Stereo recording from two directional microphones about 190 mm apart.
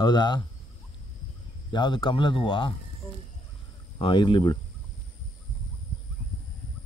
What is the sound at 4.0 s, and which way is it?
Speech, 25° left (ahead or behind).